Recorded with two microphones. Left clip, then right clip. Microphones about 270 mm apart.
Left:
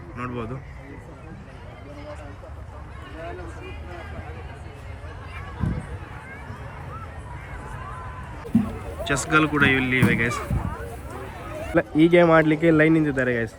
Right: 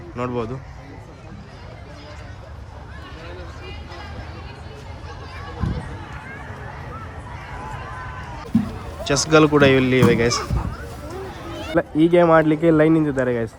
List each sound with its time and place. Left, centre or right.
0.2 s speech: centre
9.0 s speech: centre
11.7 s speech: centre